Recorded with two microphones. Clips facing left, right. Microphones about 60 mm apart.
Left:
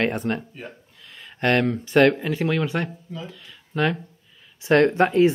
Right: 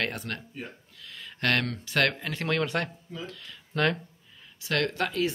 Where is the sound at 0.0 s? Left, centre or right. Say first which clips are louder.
Left 9 dB; left.